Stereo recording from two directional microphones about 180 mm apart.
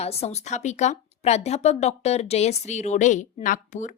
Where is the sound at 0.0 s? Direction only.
35° left (ahead or behind).